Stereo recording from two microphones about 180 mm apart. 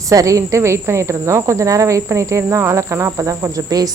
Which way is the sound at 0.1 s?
20° right (ahead or behind).